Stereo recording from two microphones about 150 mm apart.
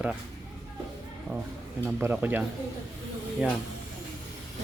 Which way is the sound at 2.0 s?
15° right (ahead or behind).